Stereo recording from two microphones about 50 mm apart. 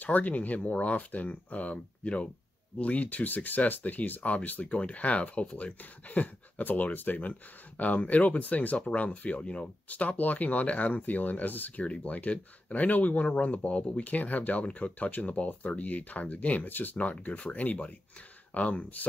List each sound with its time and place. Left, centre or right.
0.0 s speech: left